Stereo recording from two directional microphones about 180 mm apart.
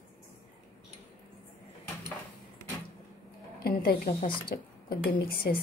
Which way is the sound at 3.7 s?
60° left (ahead or behind).